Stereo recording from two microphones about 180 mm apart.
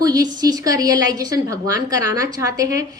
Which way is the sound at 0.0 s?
20° right (ahead or behind).